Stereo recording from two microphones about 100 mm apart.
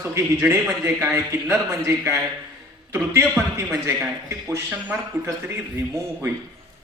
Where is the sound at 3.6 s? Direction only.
25° right (ahead or behind).